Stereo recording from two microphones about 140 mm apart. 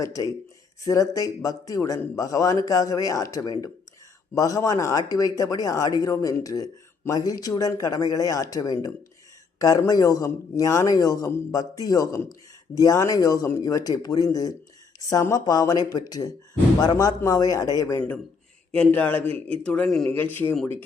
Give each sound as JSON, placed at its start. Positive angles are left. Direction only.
{"t": 0.0, "sound": "speech", "side_deg": 25}
{"t": 18.8, "sound": "a man's voice", "side_deg": 10}
{"t": 19.2, "sound": "a man's voice", "side_deg": -45}
{"t": 19.6, "sound": "a man's voice", "side_deg": 10}